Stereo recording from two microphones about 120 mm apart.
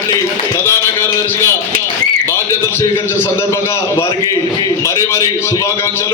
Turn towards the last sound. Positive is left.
turn(degrees=20)  # may be behind; listen again after turning